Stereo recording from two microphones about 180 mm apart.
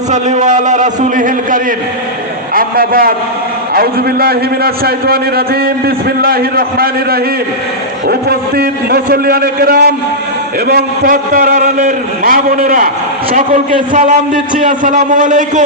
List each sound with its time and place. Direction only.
0.1 s a man's voice: 40° right (ahead or behind)